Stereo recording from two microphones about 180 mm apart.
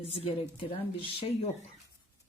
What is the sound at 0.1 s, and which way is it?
Speech, 35° left (ahead or behind).